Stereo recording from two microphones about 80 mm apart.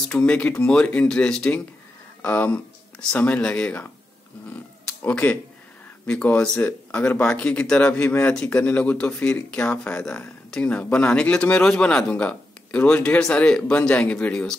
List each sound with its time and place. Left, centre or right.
0.1 s a man's voice: centre
4.8 s a man's voice: centre